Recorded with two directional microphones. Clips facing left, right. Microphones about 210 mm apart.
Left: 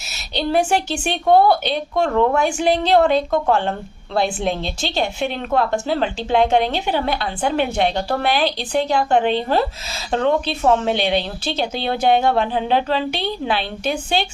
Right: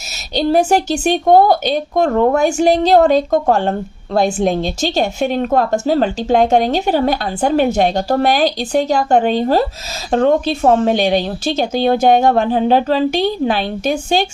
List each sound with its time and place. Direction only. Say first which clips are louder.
0.3 s a woman's voice: right 5 dB; 40° right (ahead or behind)